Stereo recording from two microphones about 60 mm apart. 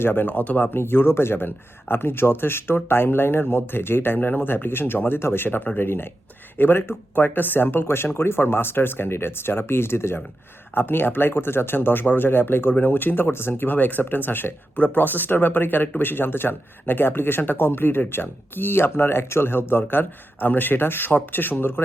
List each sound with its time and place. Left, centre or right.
0.0 s speech: left